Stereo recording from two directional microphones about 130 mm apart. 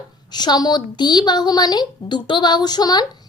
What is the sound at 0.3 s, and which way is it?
A woman's voice, 35° left (ahead or behind).